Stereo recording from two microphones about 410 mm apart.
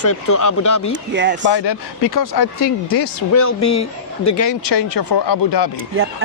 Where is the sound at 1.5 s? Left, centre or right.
Left.